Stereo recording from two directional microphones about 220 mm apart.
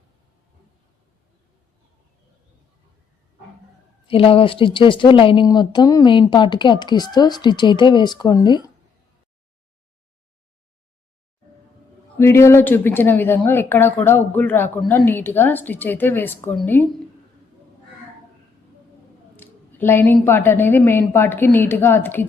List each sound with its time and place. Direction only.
4.0 s a woman's voice: 25° left (ahead or behind)
12.2 s speech: 10° left (ahead or behind)
19.4 s speech: 10° left (ahead or behind)